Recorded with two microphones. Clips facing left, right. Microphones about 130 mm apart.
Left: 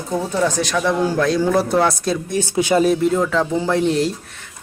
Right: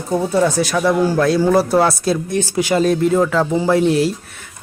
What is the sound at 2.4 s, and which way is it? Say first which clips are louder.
Speech: right 1 dB; 20° left (ahead or behind).